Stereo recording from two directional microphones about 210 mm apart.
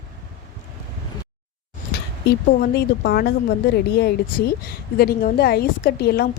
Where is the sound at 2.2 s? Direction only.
50° left (ahead or behind).